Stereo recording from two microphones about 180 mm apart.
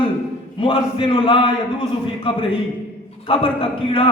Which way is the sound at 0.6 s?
30° left (ahead or behind).